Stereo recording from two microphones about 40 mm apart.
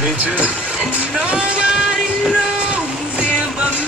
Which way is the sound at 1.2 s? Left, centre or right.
Right.